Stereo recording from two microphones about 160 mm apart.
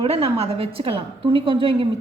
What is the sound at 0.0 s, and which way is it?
A woman's voice, 40° right (ahead or behind).